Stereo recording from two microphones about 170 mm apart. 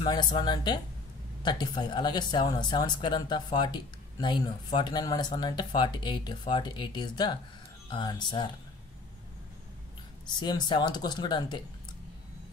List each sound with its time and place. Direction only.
0.0 s speech: 25° left (ahead or behind)
10.4 s speech: 25° left (ahead or behind)